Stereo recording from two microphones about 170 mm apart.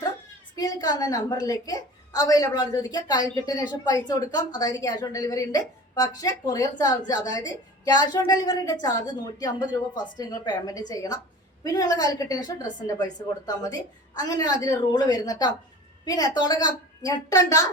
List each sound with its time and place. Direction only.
0.5 s a woman's voice: 25° left (ahead or behind)